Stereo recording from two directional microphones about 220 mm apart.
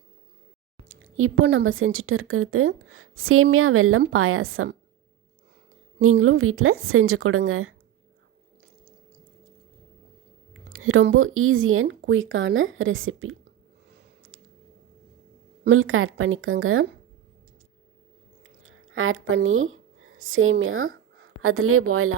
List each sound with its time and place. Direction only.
0.9 s a woman's voice: 65° right (ahead or behind)
6.0 s a woman's voice: 70° right (ahead or behind)
10.5 s speech: 70° right (ahead or behind)
15.6 s a woman's voice: 65° right (ahead or behind)
18.6 s a woman's voice: 65° right (ahead or behind)